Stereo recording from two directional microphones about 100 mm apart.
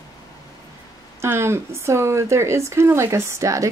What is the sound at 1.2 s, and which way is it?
Speech, 25° right (ahead or behind).